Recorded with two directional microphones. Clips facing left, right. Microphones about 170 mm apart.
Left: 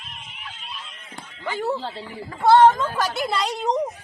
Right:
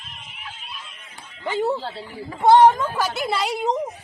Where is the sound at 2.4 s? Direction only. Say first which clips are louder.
Right 1 dB; 15° right (ahead or behind).